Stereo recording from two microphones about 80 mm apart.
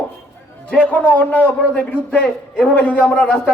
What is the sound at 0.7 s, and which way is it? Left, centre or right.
A man's voice, centre.